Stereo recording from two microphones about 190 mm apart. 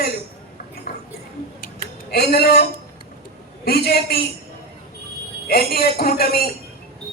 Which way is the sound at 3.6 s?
55° left (ahead or behind).